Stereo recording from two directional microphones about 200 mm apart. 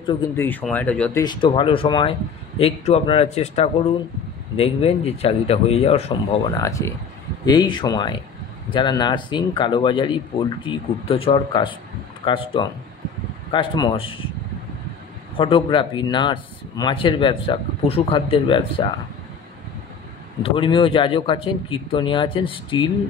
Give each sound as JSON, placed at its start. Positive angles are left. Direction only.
{"t": 0.1, "sound": "speech", "side_deg": 20}
{"t": 0.5, "sound": "speech", "side_deg": 10}
{"t": 1.2, "sound": "speech", "side_deg": 25}
{"t": 6.5, "sound": "speech", "side_deg": 15}
{"t": 15.3, "sound": "speech", "side_deg": 25}
{"t": 20.4, "sound": "speech", "side_deg": 25}